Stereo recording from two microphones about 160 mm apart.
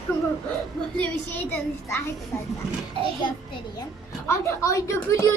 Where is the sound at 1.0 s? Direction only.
10° left (ahead or behind).